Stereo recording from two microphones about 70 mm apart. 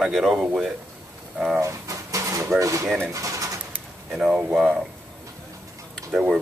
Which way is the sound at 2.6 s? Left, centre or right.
Right.